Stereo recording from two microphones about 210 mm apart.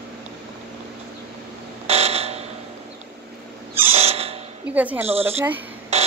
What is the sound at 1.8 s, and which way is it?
Buzzer, 30° right (ahead or behind).